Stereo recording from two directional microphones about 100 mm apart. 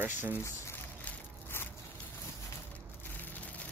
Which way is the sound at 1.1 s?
20° left (ahead or behind).